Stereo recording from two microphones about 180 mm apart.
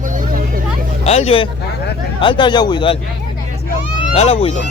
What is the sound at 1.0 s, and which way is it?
A man's voice, 35° left (ahead or behind).